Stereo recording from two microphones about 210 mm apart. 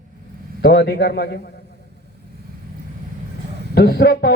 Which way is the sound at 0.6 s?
50° left (ahead or behind).